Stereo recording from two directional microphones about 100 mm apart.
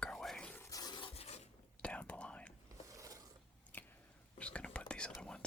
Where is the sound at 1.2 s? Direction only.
90° left.